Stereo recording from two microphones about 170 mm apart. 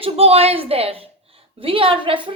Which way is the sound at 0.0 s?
35° right (ahead or behind).